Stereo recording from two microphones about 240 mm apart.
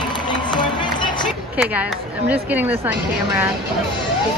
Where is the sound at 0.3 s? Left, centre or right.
Centre.